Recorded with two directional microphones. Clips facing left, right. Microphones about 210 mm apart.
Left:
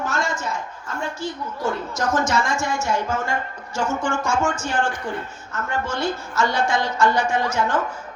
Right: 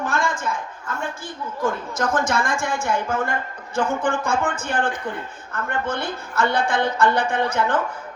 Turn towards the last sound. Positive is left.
turn(degrees=-55)  # may be behind; listen again after turning